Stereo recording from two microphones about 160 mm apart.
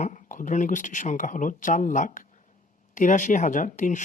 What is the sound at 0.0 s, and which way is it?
Speech, 55° left (ahead or behind).